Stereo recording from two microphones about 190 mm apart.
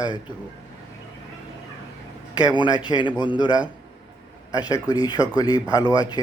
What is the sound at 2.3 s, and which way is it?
A man's voice, 20° left (ahead or behind).